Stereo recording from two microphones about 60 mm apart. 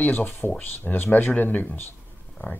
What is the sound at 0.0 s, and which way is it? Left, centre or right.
Speech, left.